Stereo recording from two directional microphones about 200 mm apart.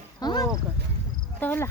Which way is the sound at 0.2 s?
20° left (ahead or behind).